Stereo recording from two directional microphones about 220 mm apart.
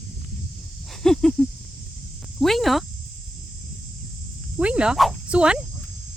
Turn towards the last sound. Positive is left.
turn(degrees=-5)  # may be behind; listen again after turning